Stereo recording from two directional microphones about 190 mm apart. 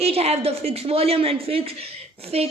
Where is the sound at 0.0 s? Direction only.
30° right (ahead or behind).